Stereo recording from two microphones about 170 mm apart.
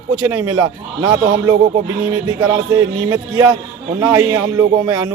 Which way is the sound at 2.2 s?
20° right (ahead or behind).